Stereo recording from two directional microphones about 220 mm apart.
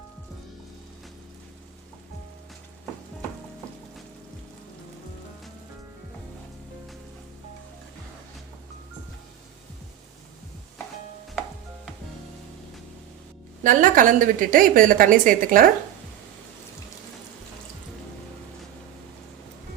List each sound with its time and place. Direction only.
13.7 s a woman's voice: 35° right (ahead or behind)